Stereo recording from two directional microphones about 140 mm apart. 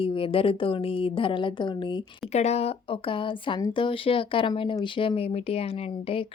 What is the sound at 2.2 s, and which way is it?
Speech, 50° left (ahead or behind).